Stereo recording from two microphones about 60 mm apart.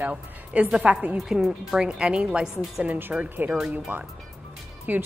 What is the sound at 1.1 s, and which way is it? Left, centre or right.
A woman's voice, centre.